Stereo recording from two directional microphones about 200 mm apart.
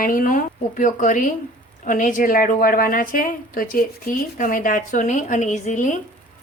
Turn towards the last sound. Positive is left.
turn(degrees=40)  # may be behind; listen again after turning